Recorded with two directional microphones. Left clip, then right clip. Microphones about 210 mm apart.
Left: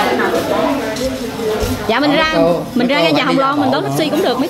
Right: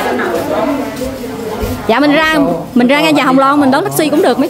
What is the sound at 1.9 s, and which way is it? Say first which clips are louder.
Speech: right 4 dB; 20° right (ahead or behind).